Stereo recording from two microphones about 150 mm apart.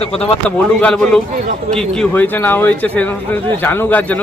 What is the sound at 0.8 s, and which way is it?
A man's voice, 10° left (ahead or behind).